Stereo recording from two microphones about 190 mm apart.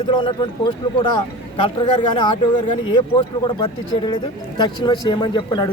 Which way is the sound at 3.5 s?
25° left (ahead or behind).